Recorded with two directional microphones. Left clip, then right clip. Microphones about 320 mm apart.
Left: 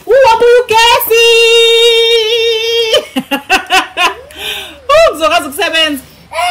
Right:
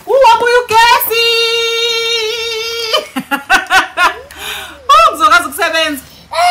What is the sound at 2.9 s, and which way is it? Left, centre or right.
Giggle, centre.